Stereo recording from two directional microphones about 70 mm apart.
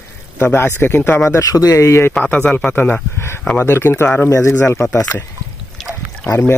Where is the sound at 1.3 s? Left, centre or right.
Left.